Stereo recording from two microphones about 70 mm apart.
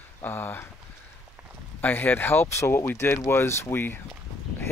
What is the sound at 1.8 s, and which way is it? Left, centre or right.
Speech, left.